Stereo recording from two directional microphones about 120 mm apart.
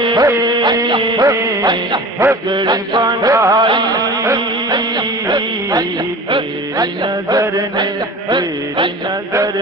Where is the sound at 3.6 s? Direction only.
40° right (ahead or behind).